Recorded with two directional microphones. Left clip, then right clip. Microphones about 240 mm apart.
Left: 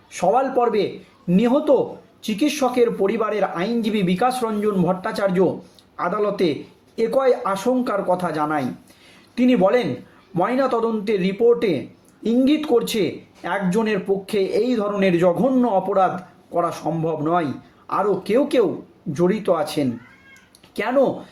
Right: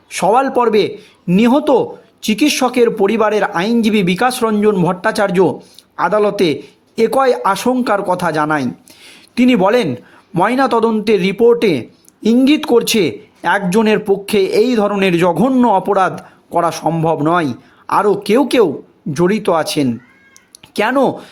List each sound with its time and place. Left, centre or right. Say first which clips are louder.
0.1 s a man's voice: right 6 dB; right